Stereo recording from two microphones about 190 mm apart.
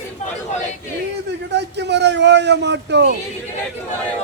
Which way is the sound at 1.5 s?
65° right (ahead or behind).